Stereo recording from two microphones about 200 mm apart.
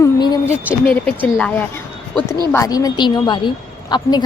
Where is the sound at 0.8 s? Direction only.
5° left (ahead or behind).